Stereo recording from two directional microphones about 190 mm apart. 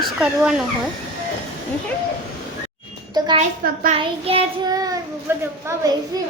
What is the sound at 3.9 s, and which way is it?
Child singing, 30° right (ahead or behind).